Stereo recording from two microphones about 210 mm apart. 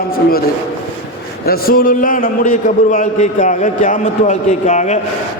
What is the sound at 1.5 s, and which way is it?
A man's voice, 45° left (ahead or behind).